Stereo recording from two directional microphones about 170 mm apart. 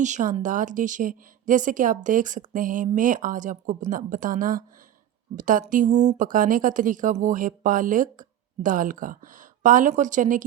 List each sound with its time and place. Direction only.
0.0 s speech: 45° right (ahead or behind)